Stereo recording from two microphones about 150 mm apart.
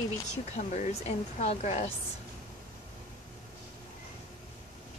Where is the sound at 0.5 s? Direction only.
50° left (ahead or behind).